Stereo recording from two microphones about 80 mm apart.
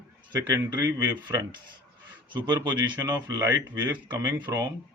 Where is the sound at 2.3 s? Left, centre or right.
Right.